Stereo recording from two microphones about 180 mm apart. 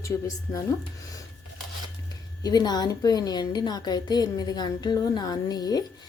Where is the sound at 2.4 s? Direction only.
20° left (ahead or behind).